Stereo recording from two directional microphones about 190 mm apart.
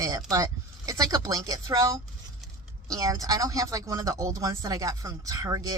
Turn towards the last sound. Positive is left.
turn(degrees=-20)  # may be behind; listen again after turning